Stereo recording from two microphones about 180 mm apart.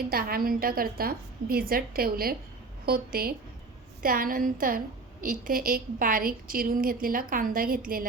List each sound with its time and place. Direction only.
0.1 s a woman's voice: 55° right (ahead or behind)